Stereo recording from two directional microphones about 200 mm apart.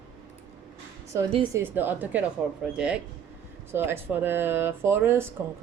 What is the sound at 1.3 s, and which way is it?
Speech, 25° right (ahead or behind).